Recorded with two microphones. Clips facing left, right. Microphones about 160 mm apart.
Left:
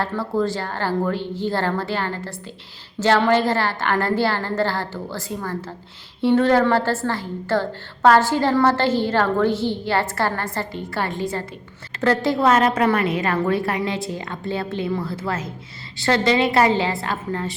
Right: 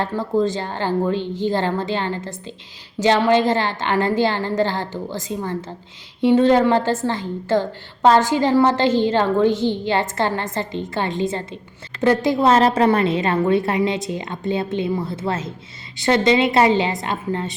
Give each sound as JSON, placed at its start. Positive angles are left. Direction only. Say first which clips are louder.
{"t": 0.0, "sound": "a woman's voice", "louder": "right 2 dB", "side_deg": -20}